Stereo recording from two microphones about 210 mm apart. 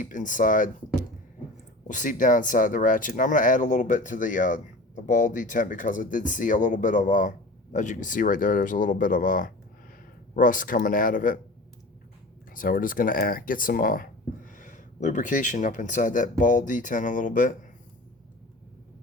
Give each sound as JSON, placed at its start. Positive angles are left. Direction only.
{"t": 0.0, "sound": "speech", "side_deg": 40}
{"t": 1.9, "sound": "speech", "side_deg": 35}
{"t": 12.5, "sound": "speech", "side_deg": 40}